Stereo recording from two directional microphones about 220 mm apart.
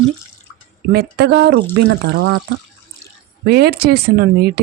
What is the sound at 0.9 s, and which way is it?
Speech, 50° right (ahead or behind).